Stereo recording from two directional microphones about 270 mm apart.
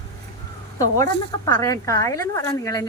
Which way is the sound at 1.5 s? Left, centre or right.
Centre.